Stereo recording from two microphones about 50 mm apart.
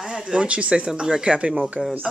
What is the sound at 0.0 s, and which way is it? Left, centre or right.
Speech, centre.